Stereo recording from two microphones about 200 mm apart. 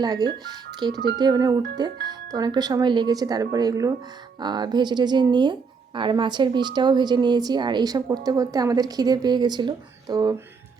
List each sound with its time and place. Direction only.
0.0 s speech: 20° right (ahead or behind)